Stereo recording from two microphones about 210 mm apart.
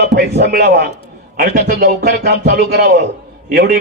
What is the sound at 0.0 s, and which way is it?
A man's voice, 50° right (ahead or behind).